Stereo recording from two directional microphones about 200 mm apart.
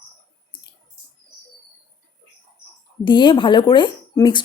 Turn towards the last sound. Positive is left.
turn(degrees=20)  # may be behind; listen again after turning